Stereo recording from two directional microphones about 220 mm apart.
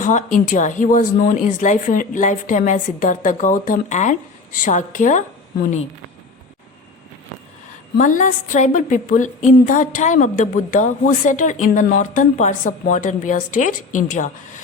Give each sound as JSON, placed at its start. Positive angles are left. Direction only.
{"t": 0.0, "sound": "speech", "side_deg": 35}
{"t": 7.9, "sound": "speech", "side_deg": 35}